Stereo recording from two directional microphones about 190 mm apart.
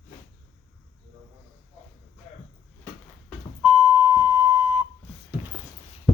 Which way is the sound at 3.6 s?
5° right (ahead or behind).